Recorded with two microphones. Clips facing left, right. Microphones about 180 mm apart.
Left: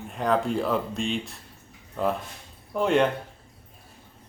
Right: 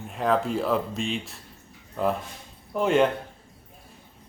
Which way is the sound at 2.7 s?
Centre (ahead or behind).